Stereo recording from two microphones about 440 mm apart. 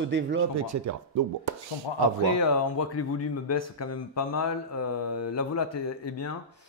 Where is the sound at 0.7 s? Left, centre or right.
Right.